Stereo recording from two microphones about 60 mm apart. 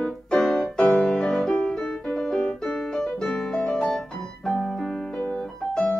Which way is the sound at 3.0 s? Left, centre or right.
Centre.